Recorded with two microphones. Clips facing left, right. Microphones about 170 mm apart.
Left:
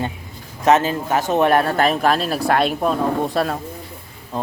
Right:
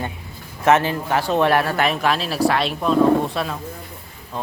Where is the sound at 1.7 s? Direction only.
40° left (ahead or behind).